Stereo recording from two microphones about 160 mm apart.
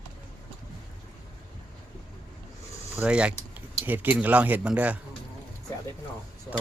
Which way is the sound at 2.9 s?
10° right (ahead or behind).